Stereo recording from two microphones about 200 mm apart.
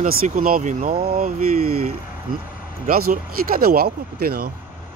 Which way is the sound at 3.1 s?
50° right (ahead or behind).